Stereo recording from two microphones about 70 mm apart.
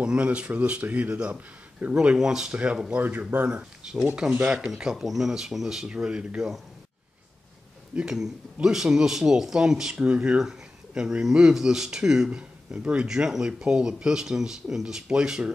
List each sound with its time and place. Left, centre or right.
0.0 s speech: centre
2.0 s speech: centre
7.9 s speech: centre